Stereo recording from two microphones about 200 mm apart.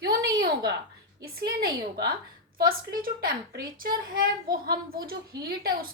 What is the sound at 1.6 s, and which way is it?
A woman's voice, 50° right (ahead or behind).